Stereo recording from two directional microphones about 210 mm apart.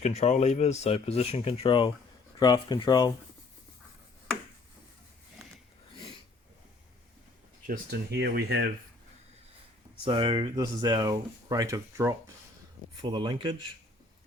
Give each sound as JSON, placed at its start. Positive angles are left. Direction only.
{"t": 0.0, "sound": "speech", "side_deg": 35}
{"t": 7.7, "sound": "speech", "side_deg": -50}
{"t": 10.0, "sound": "speech", "side_deg": -25}